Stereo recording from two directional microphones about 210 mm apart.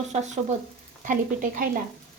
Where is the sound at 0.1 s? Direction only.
35° right (ahead or behind).